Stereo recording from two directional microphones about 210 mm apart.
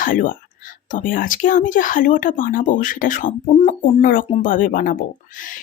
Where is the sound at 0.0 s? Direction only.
40° left (ahead or behind).